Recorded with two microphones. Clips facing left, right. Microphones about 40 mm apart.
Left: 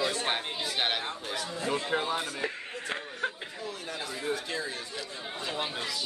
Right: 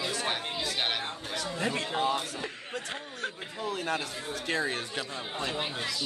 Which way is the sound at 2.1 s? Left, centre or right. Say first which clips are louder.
Left 1 dB; left.